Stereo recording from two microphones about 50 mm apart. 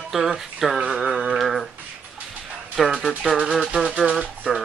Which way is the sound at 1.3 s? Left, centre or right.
Centre.